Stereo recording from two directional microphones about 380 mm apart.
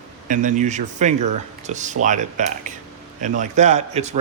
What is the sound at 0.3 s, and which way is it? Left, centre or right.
Speech, centre.